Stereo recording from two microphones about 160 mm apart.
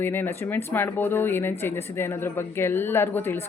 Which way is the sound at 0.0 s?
15° left (ahead or behind).